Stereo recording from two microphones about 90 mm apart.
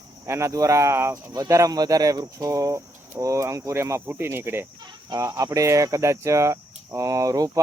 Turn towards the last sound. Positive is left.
turn(degrees=-40)  # may be behind; listen again after turning